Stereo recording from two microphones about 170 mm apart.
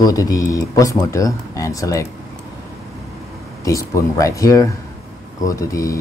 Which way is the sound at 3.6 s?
20° left (ahead or behind).